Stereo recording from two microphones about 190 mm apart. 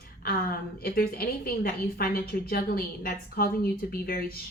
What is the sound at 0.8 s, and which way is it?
A woman's voice, 55° left (ahead or behind).